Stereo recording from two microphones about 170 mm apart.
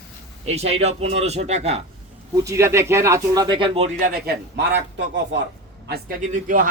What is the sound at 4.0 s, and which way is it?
A man's voice, 60° right (ahead or behind).